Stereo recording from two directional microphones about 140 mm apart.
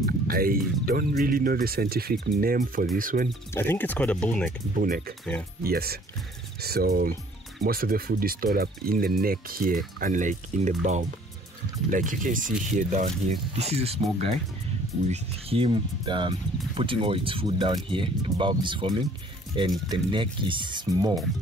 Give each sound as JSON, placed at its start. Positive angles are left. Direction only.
{"t": 0.3, "sound": "speech", "side_deg": -90}
{"t": 3.5, "sound": "speech", "side_deg": 15}
{"t": 4.7, "sound": "speech", "side_deg": -90}
{"t": 13.6, "sound": "speech", "side_deg": -50}
{"t": 15.0, "sound": "speech", "side_deg": -40}